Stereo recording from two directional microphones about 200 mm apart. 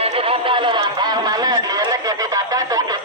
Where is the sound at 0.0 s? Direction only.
30° right (ahead or behind).